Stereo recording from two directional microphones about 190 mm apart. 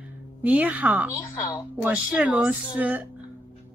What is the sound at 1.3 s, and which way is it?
Speech, 15° left (ahead or behind).